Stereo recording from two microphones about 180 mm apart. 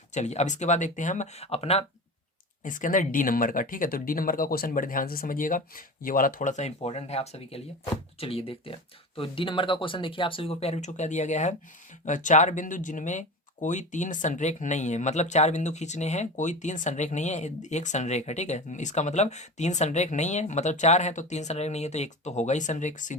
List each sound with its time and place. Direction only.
0.1 s speech: 40° left (ahead or behind)
2.6 s speech: 45° left (ahead or behind)